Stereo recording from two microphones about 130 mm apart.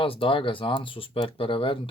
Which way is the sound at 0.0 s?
45° left (ahead or behind).